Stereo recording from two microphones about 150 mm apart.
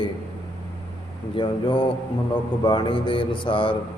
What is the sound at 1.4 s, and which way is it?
A man's voice, 35° left (ahead or behind).